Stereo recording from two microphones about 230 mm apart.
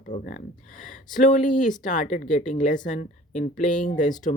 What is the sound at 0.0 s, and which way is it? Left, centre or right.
Speech, left.